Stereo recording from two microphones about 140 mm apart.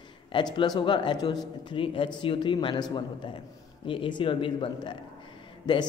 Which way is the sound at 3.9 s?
35° left (ahead or behind).